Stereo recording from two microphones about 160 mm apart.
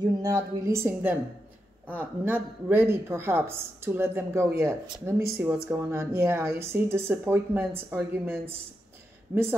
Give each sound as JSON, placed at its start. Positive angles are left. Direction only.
{"t": 0.0, "sound": "a woman's voice", "side_deg": -20}